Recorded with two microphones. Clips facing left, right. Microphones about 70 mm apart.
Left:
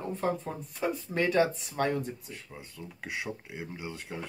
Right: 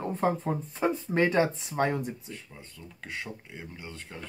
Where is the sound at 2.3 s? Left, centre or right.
Centre.